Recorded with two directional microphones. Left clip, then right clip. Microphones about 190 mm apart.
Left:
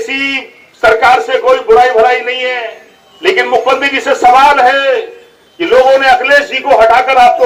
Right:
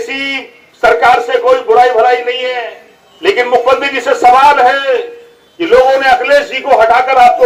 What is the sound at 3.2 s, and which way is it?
Speech, 45° right (ahead or behind).